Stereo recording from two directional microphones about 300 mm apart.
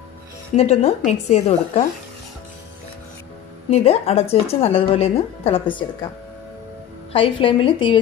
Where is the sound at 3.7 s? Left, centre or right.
Centre.